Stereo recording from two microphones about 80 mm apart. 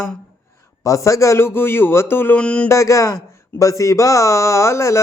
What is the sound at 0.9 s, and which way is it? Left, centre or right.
Speech, left.